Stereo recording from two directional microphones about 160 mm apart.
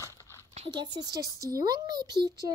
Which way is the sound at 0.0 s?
15° left (ahead or behind).